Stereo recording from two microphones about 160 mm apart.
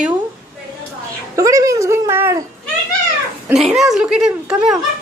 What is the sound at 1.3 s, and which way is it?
Speech, 20° right (ahead or behind).